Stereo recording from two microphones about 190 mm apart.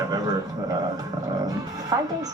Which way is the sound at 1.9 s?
15° right (ahead or behind).